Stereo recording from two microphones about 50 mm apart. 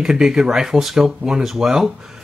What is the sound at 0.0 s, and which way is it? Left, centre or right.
Speech, centre.